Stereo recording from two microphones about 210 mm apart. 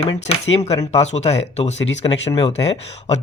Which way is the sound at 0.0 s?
30° left (ahead or behind).